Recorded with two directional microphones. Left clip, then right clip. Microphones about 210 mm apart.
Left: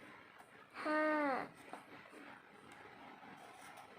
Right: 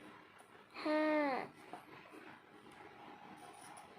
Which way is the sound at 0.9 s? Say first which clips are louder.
Right 1 dB; 15° right (ahead or behind).